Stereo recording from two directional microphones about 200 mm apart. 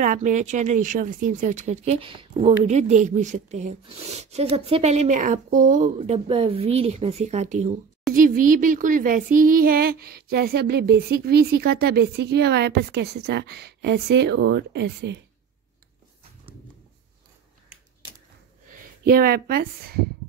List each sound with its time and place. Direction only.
0.0 s speech: 40° right (ahead or behind); by 15.1 s 60° right (ahead or behind)
18.7 s speech: 50° right (ahead or behind)